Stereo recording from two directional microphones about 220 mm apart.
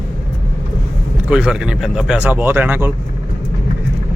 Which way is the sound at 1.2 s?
5° right (ahead or behind).